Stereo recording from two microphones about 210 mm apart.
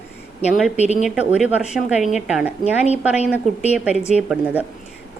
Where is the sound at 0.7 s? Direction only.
30° left (ahead or behind).